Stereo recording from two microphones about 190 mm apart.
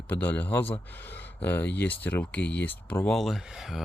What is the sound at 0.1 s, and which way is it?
Speech, 10° left (ahead or behind).